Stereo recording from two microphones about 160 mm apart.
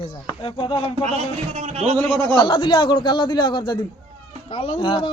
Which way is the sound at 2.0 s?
10° left (ahead or behind).